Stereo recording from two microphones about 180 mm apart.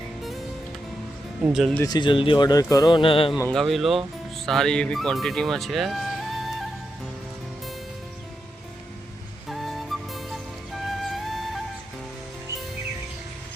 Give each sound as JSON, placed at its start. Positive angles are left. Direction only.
{"t": 1.5, "sound": "speech", "side_deg": 0}
{"t": 1.8, "sound": "speech", "side_deg": 25}
{"t": 3.5, "sound": "speech", "side_deg": 0}
{"t": 9.5, "sound": "flute", "side_deg": 0}